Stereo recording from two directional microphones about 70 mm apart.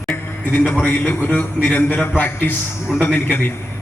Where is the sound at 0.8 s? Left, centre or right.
Left.